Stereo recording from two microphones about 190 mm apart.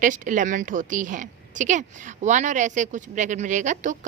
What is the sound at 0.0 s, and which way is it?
A woman's voice, 45° right (ahead or behind).